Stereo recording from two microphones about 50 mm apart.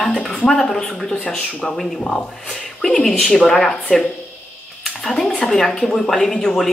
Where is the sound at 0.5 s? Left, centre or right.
Centre.